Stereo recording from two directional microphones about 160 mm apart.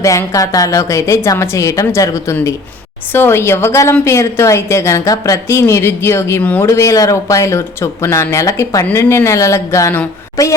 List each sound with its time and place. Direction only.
0.0 s a woman's voice: 20° left (ahead or behind)